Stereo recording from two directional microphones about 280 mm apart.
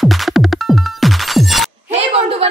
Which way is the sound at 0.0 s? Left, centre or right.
Centre.